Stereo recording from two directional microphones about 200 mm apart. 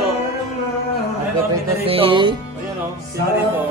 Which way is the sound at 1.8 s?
25° right (ahead or behind).